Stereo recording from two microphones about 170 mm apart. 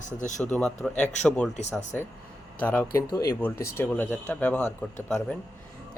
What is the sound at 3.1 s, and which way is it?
Speech, 20° left (ahead or behind).